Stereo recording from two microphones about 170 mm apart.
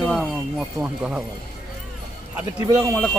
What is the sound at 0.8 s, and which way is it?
Speech, 5° right (ahead or behind).